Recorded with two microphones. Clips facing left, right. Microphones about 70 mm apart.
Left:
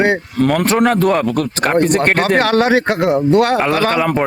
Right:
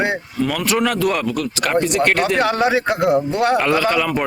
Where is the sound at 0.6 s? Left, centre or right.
Left.